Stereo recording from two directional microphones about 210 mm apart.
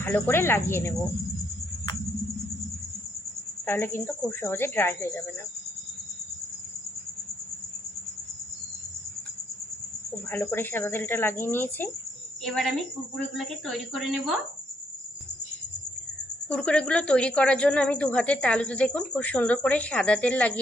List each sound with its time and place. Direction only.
0.0 s speech: 10° left (ahead or behind)
3.7 s speech: 10° left (ahead or behind)
10.2 s a woman's voice: 10° left (ahead or behind)
16.5 s a woman's voice: 5° left (ahead or behind)